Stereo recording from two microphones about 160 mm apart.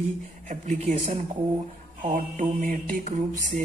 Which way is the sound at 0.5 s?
50° right (ahead or behind).